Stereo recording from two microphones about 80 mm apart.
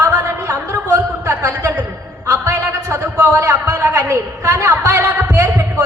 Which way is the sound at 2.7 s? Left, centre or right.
Right.